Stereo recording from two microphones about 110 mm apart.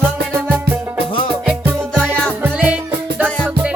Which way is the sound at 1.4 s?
10° right (ahead or behind).